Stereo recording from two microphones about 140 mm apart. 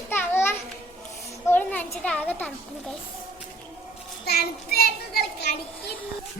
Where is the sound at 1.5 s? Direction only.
10° left (ahead or behind).